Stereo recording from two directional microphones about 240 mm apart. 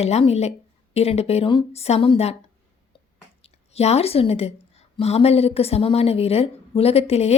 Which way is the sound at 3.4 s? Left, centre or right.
Left.